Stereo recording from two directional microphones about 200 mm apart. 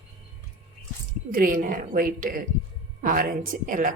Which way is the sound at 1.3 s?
45° right (ahead or behind).